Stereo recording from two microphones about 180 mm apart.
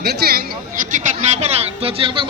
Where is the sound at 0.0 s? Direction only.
60° right (ahead or behind).